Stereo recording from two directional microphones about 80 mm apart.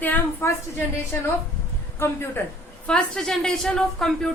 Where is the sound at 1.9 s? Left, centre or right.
Left.